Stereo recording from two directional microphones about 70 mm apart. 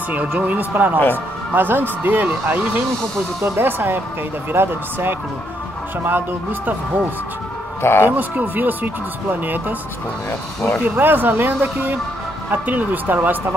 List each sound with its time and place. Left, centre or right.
0.1 s speech: right
0.9 s speech: left
1.5 s speech: right
7.8 s a man's voice: left
8.2 s speech: right
11.0 s speech: right